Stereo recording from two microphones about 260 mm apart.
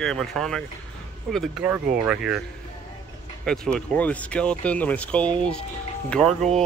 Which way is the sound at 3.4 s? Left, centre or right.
Centre.